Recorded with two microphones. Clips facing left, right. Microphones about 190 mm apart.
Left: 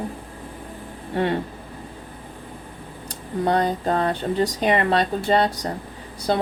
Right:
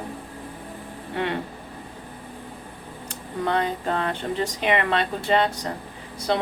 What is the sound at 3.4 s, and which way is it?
Speech, 35° left (ahead or behind).